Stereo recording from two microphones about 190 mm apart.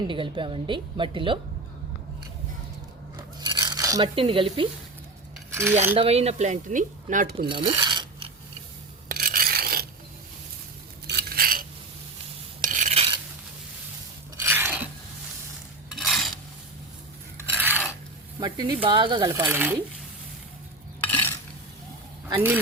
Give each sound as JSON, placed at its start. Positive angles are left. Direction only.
{"t": 0.1, "sound": "speech", "side_deg": -25}
{"t": 3.2, "sound": "a sound", "side_deg": -20}
{"t": 5.5, "sound": "cutlery", "side_deg": -15}
{"t": 6.0, "sound": "speech", "side_deg": -35}
{"t": 7.4, "sound": "a sound", "side_deg": -25}
{"t": 9.0, "sound": "filing", "side_deg": -50}
{"t": 11.0, "sound": "cutlery", "side_deg": -60}
{"t": 12.6, "sound": "a sound", "side_deg": -40}
{"t": 14.3, "sound": "filing", "side_deg": -10}
{"t": 16.0, "sound": "filing", "side_deg": 0}
{"t": 17.4, "sound": "filing", "side_deg": -10}
{"t": 18.3, "sound": "speech", "side_deg": -20}
{"t": 21.0, "sound": "stir", "side_deg": 10}